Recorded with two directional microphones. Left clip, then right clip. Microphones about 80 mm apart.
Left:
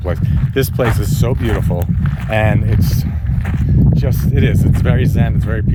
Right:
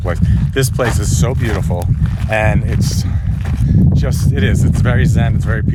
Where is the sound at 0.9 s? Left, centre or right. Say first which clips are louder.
Even; right.